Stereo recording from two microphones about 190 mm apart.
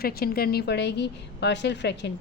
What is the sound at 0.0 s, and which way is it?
A woman's voice, 55° left (ahead or behind).